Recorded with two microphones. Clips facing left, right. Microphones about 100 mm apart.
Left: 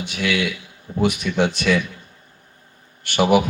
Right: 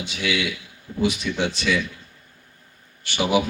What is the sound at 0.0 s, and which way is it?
Speech, 55° left (ahead or behind).